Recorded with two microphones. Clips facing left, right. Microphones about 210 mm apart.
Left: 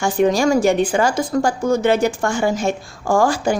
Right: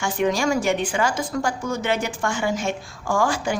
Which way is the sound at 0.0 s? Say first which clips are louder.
Left 6 dB; 35° left (ahead or behind).